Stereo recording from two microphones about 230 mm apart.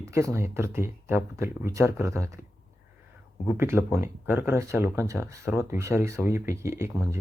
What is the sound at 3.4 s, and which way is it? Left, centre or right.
Speech, centre.